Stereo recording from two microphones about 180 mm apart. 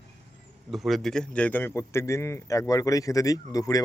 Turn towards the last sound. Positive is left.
turn(degrees=20)  # may be behind; listen again after turning